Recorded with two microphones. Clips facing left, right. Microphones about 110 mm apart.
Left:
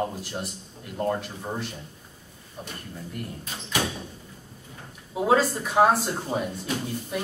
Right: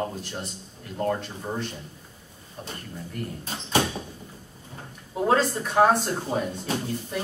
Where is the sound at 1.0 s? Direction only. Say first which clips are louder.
Even; 5° left (ahead or behind).